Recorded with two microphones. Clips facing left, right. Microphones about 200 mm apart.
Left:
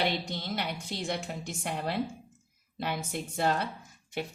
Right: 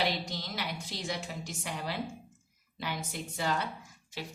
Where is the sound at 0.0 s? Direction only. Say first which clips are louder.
Left 2 dB; 60° left (ahead or behind).